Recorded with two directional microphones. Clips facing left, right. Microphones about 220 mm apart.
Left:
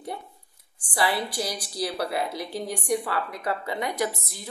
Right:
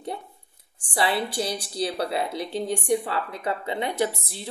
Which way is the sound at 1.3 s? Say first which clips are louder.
Right 3 dB; 25° right (ahead or behind).